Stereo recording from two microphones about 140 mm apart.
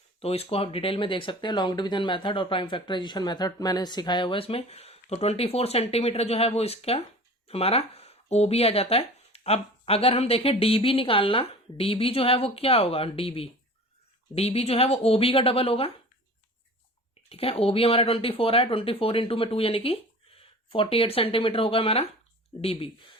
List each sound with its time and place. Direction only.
0.2 s speech: 45° left (ahead or behind)
17.2 s speech: 45° left (ahead or behind)